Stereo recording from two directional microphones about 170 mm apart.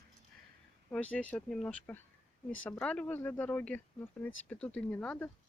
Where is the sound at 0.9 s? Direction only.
10° left (ahead or behind).